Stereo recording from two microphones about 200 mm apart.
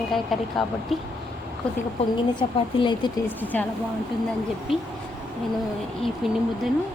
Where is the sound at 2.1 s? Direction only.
25° left (ahead or behind).